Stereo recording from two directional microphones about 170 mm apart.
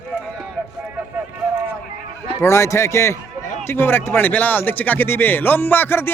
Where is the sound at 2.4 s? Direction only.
15° left (ahead or behind).